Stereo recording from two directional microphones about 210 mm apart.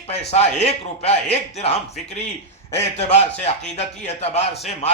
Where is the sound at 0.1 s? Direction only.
30° left (ahead or behind).